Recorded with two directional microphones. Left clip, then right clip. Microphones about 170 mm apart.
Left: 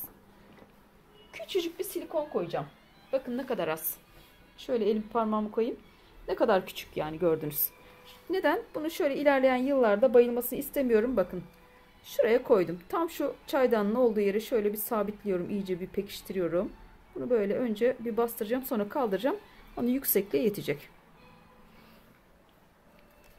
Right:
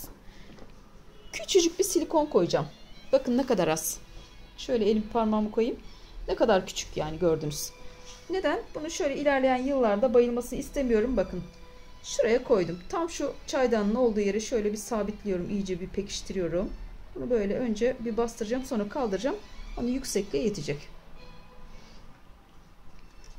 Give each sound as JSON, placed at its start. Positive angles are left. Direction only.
{"t": 1.3, "sound": "a woman's voice", "side_deg": -40}
{"t": 4.6, "sound": "a woman's voice", "side_deg": 5}
{"t": 8.3, "sound": "a woman's voice", "side_deg": 45}
{"t": 12.1, "sound": "speech", "side_deg": 35}